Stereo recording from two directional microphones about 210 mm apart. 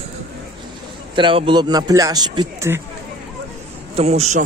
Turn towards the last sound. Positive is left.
turn(degrees=-35)  # may be behind; listen again after turning